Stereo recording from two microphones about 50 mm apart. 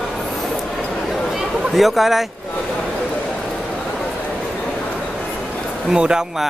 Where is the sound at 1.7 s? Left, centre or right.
Centre.